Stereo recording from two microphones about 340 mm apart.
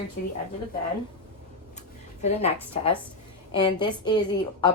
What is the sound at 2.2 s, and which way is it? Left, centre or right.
A woman's voice, centre.